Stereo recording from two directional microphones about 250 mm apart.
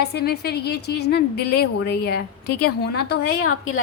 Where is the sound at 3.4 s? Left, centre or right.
Left.